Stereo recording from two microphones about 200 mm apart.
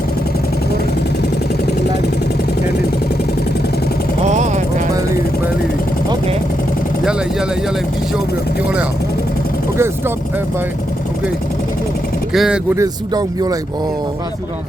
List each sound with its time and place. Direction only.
4.3 s vehicle: 35° right (ahead or behind)
7.0 s vehicle: 5° right (ahead or behind)
12.3 s speech: centre (ahead or behind)
12.7 s speech: 15° right (ahead or behind)